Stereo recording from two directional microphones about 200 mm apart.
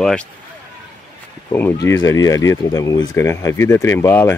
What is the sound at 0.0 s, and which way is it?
Speech, 5° left (ahead or behind).